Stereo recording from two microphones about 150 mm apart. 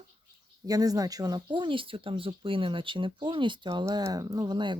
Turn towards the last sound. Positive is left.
turn(degrees=-30)  # may be behind; listen again after turning